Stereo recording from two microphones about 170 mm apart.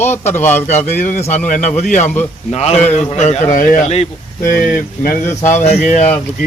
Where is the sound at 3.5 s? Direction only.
55° left (ahead or behind).